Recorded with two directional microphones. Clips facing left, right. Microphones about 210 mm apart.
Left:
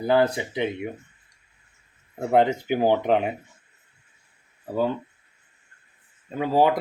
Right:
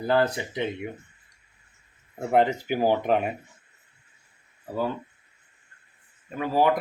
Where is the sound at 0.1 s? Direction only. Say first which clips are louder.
Left 3 dB; 15° left (ahead or behind).